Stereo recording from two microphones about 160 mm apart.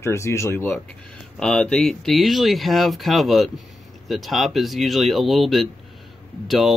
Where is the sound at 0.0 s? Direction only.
15° left (ahead or behind).